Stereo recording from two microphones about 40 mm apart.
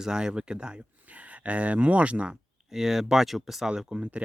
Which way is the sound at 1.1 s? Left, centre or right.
Right.